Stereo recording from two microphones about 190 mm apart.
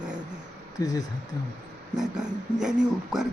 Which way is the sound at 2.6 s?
5° right (ahead or behind).